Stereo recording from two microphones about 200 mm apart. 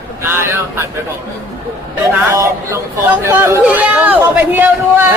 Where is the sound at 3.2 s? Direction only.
15° right (ahead or behind).